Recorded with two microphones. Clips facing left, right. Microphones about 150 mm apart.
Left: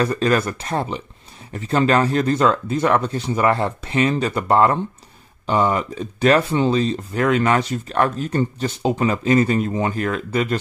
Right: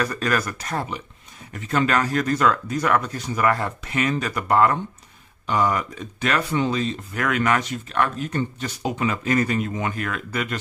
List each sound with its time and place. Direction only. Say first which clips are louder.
0.0 s speech: left 5 dB; 25° left (ahead or behind)